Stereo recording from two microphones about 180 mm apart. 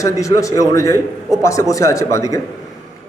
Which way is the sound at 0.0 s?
20° left (ahead or behind).